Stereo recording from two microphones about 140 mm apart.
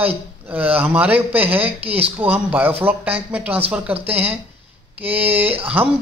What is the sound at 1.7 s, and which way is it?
Speech, 45° right (ahead or behind).